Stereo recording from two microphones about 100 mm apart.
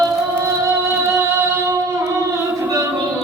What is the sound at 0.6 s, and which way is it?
Music, 30° right (ahead or behind).